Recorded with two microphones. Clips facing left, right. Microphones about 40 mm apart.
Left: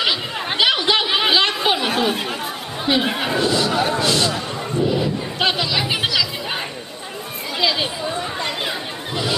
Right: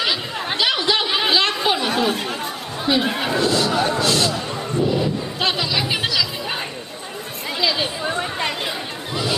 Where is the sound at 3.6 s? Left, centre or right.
Centre.